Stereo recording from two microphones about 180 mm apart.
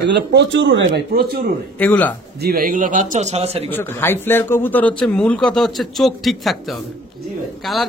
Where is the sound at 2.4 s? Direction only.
55° right (ahead or behind); by 3.7 s 35° right (ahead or behind).